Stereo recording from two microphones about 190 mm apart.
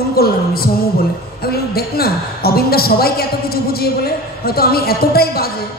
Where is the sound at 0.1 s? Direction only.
55° left (ahead or behind).